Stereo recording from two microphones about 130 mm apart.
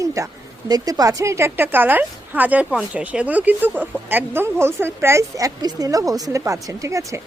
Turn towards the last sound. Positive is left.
turn(degrees=-25)  # may be behind; listen again after turning